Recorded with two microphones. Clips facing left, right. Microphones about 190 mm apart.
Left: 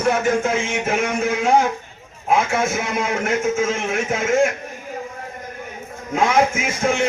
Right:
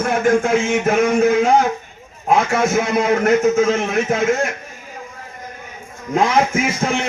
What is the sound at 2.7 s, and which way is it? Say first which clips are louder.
Music: right 6 dB; 40° right (ahead or behind).